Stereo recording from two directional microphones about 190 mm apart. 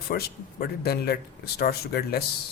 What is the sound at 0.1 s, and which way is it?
Speech, 55° left (ahead or behind).